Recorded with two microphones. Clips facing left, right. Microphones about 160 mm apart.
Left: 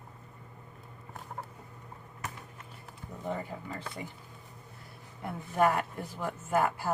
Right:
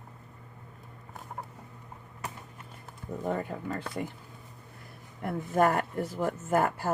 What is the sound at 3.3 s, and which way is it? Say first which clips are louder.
Speech: right 4 dB; 55° right (ahead or behind).